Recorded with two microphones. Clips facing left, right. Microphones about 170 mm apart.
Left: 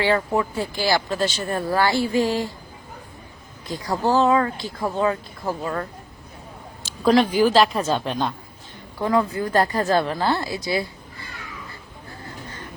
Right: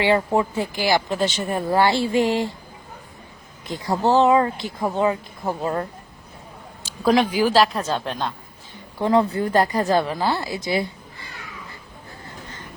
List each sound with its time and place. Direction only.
0.0 s speech: 20° right (ahead or behind)
3.7 s speech: 20° right (ahead or behind)
6.8 s speech: 10° right (ahead or behind)
9.0 s a woman's voice: 25° right (ahead or behind)